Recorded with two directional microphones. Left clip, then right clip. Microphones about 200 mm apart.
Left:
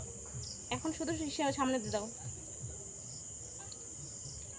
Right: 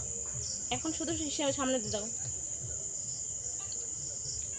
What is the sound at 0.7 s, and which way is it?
Cricket, 10° left (ahead or behind).